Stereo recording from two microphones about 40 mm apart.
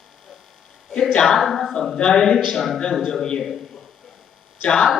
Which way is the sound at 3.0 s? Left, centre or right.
Centre.